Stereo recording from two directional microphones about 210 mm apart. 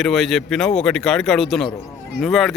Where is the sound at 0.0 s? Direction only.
Centre (ahead or behind).